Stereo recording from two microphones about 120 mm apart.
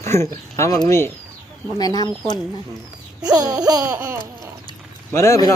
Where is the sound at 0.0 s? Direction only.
25° left (ahead or behind).